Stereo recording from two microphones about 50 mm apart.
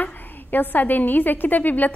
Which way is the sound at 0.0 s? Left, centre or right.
Left.